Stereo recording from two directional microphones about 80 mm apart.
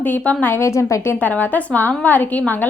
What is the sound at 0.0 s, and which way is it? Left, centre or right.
A woman's voice, left.